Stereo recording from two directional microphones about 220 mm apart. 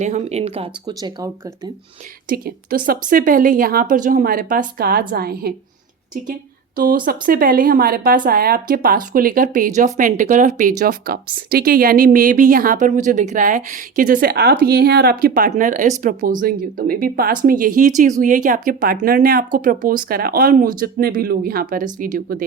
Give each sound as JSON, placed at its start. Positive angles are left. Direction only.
{"t": 0.0, "sound": "speech", "side_deg": -30}
{"t": 2.3, "sound": "a woman's voice", "side_deg": -40}
{"t": 6.7, "sound": "a woman's voice", "side_deg": -40}